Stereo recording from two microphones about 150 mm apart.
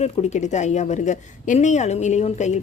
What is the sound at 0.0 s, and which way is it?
A woman's voice, 50° left (ahead or behind).